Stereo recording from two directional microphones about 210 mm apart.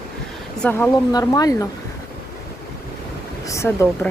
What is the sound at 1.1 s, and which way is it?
Speech, 15° left (ahead or behind).